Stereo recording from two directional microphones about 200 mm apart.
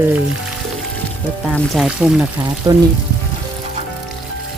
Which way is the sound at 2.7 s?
20° right (ahead or behind).